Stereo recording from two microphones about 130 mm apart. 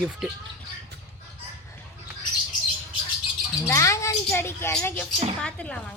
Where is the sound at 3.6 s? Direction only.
20° left (ahead or behind).